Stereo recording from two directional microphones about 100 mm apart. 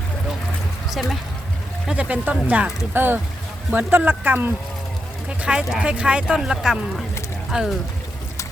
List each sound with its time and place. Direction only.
1.9 s speech: 15° right (ahead or behind)